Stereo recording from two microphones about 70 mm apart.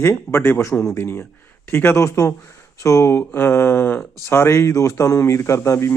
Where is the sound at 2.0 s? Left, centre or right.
Left.